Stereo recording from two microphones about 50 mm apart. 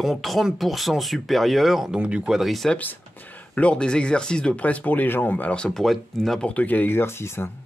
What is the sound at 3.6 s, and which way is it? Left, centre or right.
Speech, left.